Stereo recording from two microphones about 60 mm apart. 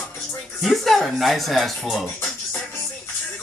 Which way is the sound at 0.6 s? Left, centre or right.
Centre.